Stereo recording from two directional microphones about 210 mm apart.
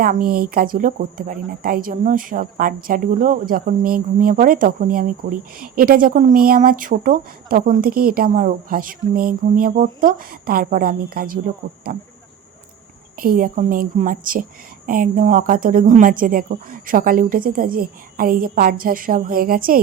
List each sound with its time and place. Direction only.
0.0 s speech: 45° right (ahead or behind)
13.1 s a woman's voice: 45° right (ahead or behind)